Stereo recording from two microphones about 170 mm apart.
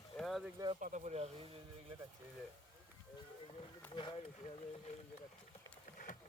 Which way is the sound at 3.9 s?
30° left (ahead or behind).